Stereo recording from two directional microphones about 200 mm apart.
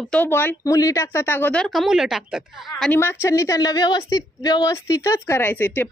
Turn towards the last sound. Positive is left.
turn(degrees=10)  # may be behind; listen again after turning